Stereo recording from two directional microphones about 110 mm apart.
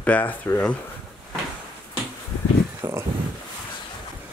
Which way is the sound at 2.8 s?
25° right (ahead or behind).